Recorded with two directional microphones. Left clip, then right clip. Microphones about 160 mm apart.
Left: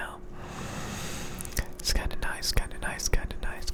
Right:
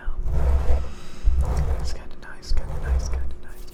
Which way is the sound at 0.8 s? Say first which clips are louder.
Left 4 dB; 40° left (ahead or behind).